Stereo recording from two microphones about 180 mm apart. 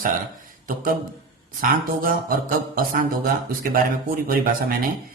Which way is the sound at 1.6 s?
50° right (ahead or behind).